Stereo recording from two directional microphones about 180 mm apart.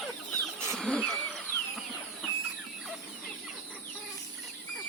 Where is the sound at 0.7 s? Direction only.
5° left (ahead or behind).